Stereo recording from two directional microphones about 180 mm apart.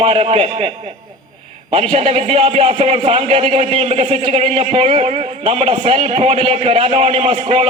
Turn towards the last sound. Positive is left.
turn(degrees=-30)  # may be behind; listen again after turning